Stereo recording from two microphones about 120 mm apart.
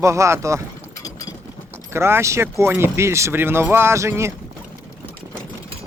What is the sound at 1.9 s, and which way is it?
Speech, 20° right (ahead or behind).